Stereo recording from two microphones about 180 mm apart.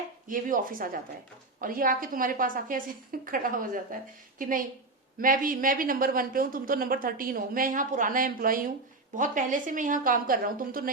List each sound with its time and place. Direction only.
0.3 s a woman's voice: 50° right (ahead or behind)